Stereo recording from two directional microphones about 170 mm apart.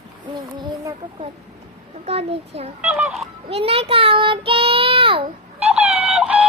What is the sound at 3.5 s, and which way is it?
Child singing, 35° right (ahead or behind).